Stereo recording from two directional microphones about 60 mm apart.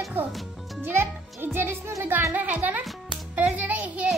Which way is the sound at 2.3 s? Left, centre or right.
Right.